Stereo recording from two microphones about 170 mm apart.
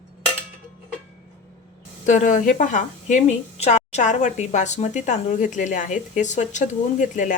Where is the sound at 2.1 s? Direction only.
50° left (ahead or behind).